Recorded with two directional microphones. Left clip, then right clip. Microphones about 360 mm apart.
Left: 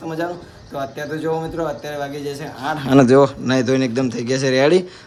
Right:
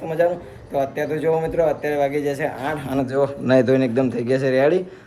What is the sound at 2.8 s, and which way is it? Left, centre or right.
Speech, centre.